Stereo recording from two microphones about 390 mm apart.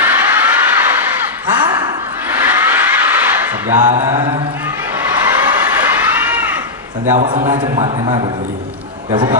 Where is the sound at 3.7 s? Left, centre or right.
Centre.